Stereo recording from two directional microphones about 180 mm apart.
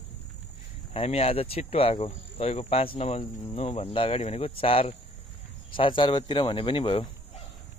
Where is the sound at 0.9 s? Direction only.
35° left (ahead or behind).